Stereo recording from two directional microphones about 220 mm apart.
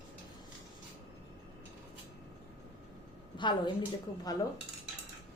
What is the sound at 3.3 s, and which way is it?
Speech, 20° left (ahead or behind).